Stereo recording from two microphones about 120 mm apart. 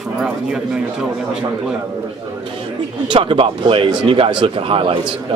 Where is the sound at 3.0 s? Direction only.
45° right (ahead or behind).